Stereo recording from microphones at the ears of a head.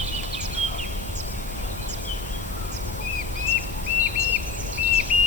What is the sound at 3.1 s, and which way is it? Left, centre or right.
Bird vocalization, left.